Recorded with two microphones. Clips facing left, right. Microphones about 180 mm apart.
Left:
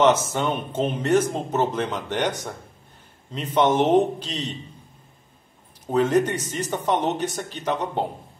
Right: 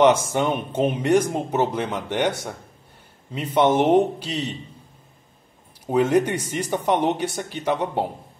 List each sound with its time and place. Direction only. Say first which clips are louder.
0.0 s speech: right 2 dB; 10° right (ahead or behind)
3.5 s speech: right 1 dB; 10° right (ahead or behind)
5.9 s speech: right 1 dB; 10° right (ahead or behind)